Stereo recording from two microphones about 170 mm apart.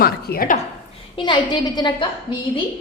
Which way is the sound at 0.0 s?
60° left (ahead or behind).